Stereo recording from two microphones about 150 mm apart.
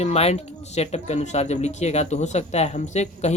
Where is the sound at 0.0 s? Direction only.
45° left (ahead or behind).